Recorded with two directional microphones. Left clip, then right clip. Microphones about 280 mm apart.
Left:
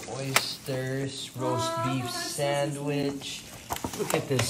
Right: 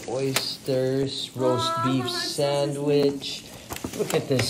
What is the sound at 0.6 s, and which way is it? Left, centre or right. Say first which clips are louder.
Speech: right 9 dB; left.